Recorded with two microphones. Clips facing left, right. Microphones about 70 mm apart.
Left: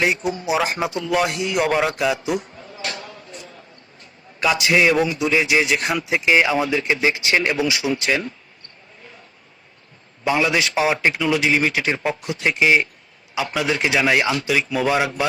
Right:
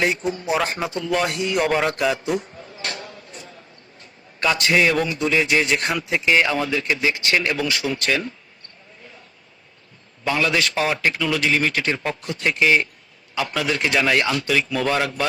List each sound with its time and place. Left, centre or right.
0.4 s music: centre
2.6 s a sound: right
4.4 s speech: centre
6.0 s speech: centre
10.2 s speech: centre